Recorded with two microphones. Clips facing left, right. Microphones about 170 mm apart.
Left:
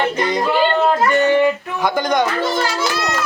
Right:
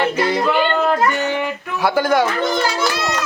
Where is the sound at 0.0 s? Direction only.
5° right (ahead or behind).